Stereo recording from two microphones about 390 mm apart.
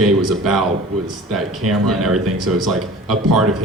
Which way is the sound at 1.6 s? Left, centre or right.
Right.